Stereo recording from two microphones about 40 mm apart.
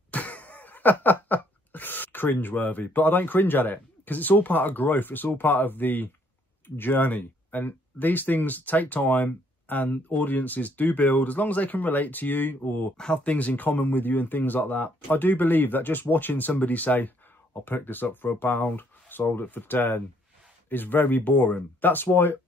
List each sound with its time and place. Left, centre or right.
0.1 s a sound: left
6.8 s speech: left
12.9 s speech: left
13.2 s speech: left
13.5 s speech: left
17.6 s speech: left
21.8 s speech: left